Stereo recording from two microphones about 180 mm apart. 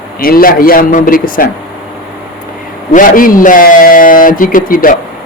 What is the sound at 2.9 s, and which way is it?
A man's voice, 50° left (ahead or behind).